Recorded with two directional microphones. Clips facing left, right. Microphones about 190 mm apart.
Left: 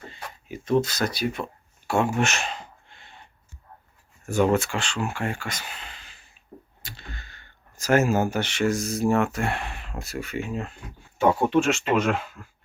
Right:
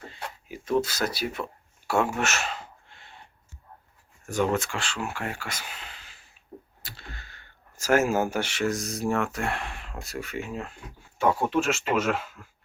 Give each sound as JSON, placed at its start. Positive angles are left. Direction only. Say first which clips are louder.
{"t": 0.1, "sound": "a sound", "louder": "left 1 dB", "side_deg": -5}
{"t": 0.8, "sound": "speech", "louder": "left 2 dB", "side_deg": -5}
{"t": 4.3, "sound": "speech", "louder": "left 4 dB", "side_deg": 10}
{"t": 4.8, "sound": "speech", "louder": "left 4 dB", "side_deg": -5}